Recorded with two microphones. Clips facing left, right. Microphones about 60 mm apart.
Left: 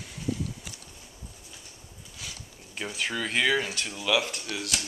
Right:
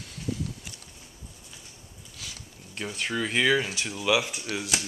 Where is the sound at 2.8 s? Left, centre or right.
Centre.